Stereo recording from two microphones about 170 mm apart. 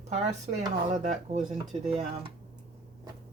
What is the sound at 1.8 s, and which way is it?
Speech, 35° right (ahead or behind).